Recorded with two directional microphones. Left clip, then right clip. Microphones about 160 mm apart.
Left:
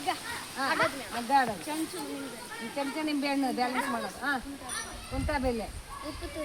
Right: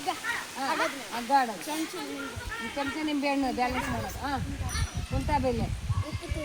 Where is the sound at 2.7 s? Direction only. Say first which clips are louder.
Even; 20° left (ahead or behind).